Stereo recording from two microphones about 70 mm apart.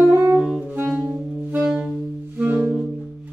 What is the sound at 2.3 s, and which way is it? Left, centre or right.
Music, centre.